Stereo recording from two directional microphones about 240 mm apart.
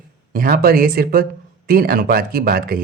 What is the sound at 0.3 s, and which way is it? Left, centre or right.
Speech, right.